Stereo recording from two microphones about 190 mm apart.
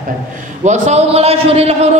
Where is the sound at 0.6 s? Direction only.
40° right (ahead or behind).